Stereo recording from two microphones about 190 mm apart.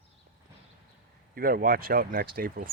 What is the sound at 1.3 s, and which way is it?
Speech, 50° right (ahead or behind).